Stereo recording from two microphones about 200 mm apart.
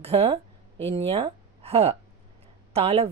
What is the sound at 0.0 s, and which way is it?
A woman's voice, 30° right (ahead or behind).